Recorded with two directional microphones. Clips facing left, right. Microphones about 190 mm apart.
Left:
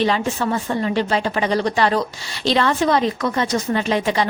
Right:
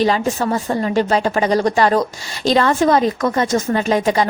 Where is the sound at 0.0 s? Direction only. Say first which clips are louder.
Right 3 dB; 40° right (ahead or behind).